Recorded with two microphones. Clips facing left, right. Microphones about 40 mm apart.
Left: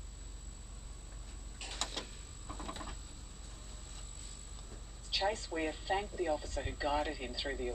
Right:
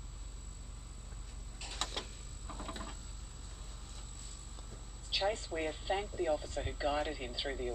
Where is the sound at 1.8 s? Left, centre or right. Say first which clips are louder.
Right 1 dB; centre.